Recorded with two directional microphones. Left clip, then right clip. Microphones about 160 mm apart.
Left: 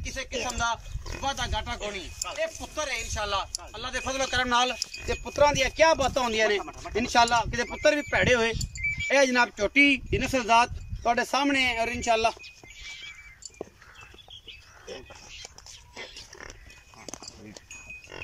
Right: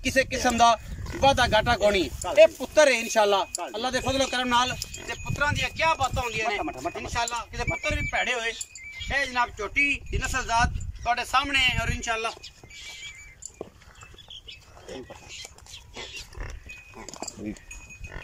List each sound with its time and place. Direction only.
0.0 s speech: 85° right
2.3 s speech: 75° right (ahead or behind); by 3.4 s 55° right (ahead or behind)
3.7 s speech: 30° right (ahead or behind)
4.3 s speech: 5° right (ahead or behind)
5.0 s a man's voice: 35° left (ahead or behind); by 6.6 s 60° left (ahead or behind)
7.0 s a man's voice: 90° left; by 12.4 s 25° left (ahead or behind)